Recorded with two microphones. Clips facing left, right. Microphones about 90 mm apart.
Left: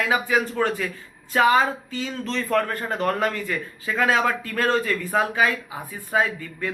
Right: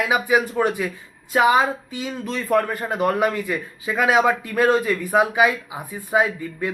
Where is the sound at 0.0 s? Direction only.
15° right (ahead or behind).